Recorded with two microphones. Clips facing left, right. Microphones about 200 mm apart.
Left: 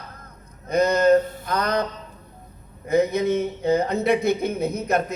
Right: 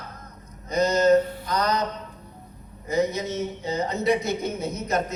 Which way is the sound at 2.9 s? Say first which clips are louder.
Left 5 dB; 55° left (ahead or behind).